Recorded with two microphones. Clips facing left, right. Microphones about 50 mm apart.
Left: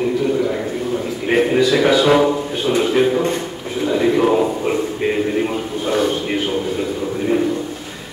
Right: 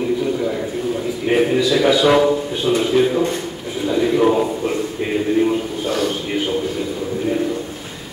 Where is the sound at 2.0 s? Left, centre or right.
Centre.